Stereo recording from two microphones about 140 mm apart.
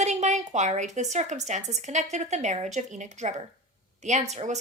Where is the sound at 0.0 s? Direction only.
55° right (ahead or behind).